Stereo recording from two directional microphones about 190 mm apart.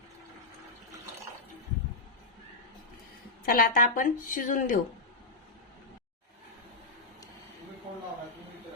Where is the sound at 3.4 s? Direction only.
50° left (ahead or behind).